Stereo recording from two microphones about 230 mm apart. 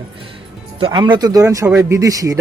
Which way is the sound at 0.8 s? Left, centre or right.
Right.